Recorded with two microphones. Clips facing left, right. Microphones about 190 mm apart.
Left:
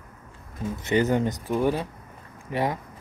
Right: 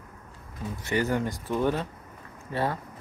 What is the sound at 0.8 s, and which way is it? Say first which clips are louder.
Speech: left 4 dB; 20° left (ahead or behind).